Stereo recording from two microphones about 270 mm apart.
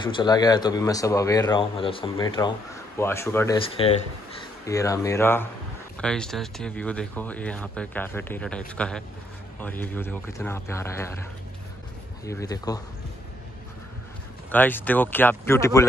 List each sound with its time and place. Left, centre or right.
0.0 s speech: centre
3.6 s speech: centre
12.3 s speech: centre
14.5 s speech: centre